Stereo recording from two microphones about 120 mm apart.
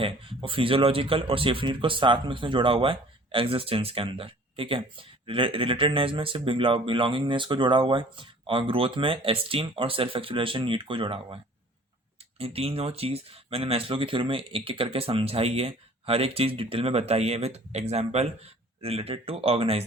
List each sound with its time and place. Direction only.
0.0 s speech: 45° right (ahead or behind)
12.4 s speech: 55° right (ahead or behind)